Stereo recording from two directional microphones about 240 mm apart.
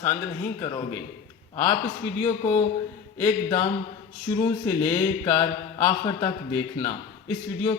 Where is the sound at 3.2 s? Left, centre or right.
Centre.